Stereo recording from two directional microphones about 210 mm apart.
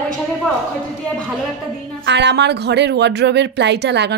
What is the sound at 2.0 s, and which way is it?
Speech, 55° right (ahead or behind).